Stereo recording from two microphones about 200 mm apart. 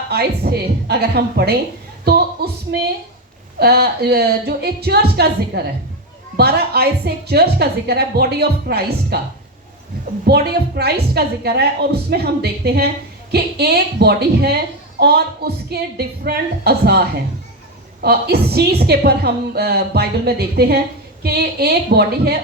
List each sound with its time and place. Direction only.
0.1 s a woman's voice: 55° right (ahead or behind)
2.0 s a sound: 50° right (ahead or behind)
3.6 s a woman's voice: 50° right (ahead or behind)
10.2 s a woman's voice: 50° right (ahead or behind)